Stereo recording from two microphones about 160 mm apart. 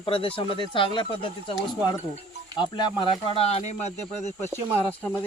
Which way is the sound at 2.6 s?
30° left (ahead or behind).